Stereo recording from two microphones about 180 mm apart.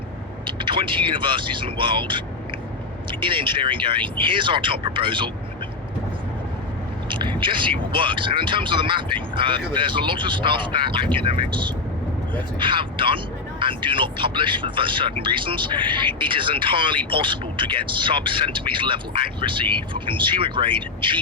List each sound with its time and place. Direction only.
0.4 s speech: 25° right (ahead or behind)
7.1 s speech: 25° right (ahead or behind)